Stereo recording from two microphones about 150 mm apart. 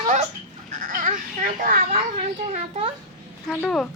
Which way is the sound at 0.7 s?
65° right (ahead or behind).